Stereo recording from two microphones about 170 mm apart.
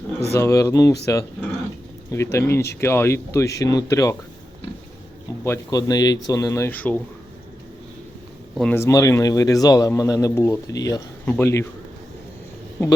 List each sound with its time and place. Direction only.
0.3 s speech: 15° left (ahead or behind)
5.4 s speech: 20° left (ahead or behind)
8.7 s speech: 20° left (ahead or behind)